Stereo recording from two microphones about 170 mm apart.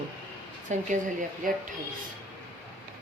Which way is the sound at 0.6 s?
45° right (ahead or behind).